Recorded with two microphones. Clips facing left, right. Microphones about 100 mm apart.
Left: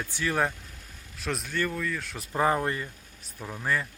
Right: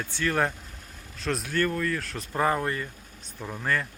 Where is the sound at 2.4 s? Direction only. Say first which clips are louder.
Even; 15° left (ahead or behind).